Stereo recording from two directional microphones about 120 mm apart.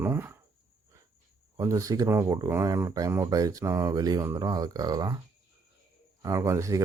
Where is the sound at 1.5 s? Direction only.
25° right (ahead or behind).